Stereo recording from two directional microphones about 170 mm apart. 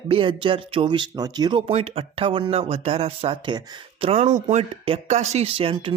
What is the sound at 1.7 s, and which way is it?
Speech, 35° right (ahead or behind).